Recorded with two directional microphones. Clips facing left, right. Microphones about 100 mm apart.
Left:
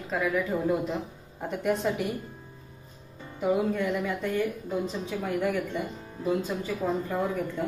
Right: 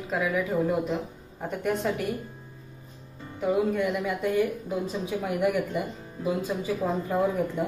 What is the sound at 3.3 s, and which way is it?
Speech, centre (ahead or behind).